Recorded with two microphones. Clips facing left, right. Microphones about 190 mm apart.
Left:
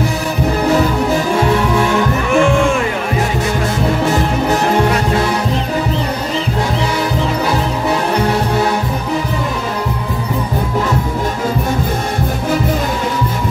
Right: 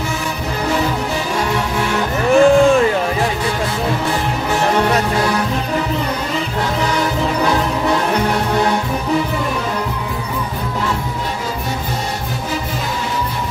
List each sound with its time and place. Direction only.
2.3 s music: 35° right (ahead or behind)